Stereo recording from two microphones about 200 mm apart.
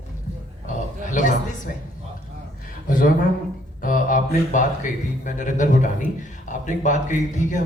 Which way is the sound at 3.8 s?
45° left (ahead or behind).